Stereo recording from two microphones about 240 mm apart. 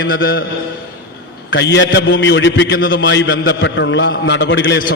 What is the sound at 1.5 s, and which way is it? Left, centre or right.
A man's voice, left.